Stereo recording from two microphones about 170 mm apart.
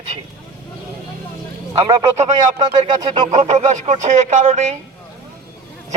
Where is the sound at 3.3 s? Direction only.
40° right (ahead or behind).